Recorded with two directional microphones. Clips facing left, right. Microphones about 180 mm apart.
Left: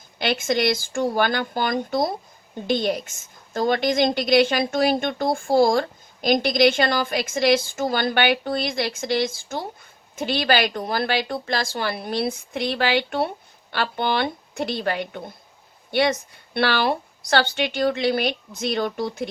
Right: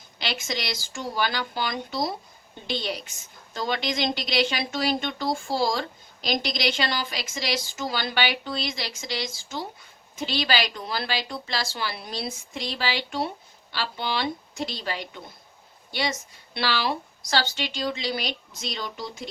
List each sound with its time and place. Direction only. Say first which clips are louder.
0.2 s a woman's voice: left 10 dB; 55° left (ahead or behind)